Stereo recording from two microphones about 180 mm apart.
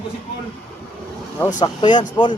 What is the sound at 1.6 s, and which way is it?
Speech, 25° left (ahead or behind).